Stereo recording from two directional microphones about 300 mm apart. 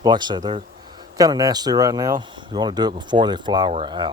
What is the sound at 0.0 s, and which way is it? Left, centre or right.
Speech, centre.